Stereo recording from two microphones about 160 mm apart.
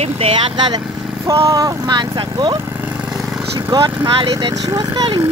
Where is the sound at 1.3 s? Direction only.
25° right (ahead or behind).